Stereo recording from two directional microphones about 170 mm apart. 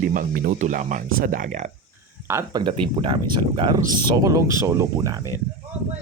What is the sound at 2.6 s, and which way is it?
Speech, 30° right (ahead or behind).